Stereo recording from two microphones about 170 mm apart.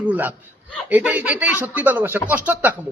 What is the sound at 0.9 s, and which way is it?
Speech, 10° right (ahead or behind).